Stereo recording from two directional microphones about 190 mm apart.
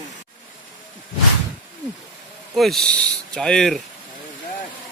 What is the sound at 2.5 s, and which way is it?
Speech, centre (ahead or behind).